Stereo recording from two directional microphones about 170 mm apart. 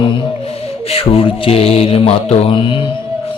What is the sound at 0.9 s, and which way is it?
Mantra, 35° left (ahead or behind).